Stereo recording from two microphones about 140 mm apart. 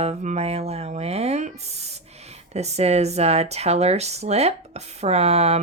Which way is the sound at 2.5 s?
50° right (ahead or behind).